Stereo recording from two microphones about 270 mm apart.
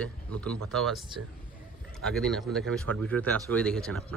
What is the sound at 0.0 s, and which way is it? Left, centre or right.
Speech, centre.